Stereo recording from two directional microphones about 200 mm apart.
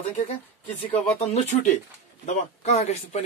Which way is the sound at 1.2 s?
35° left (ahead or behind).